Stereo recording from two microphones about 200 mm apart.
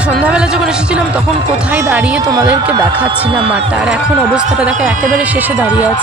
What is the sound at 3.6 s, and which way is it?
Speech, 5° right (ahead or behind).